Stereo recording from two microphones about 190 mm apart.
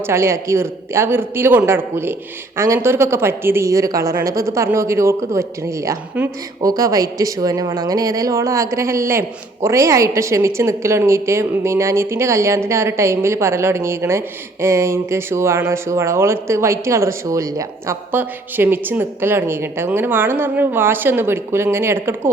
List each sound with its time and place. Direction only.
0.1 s a woman's voice: 15° right (ahead or behind)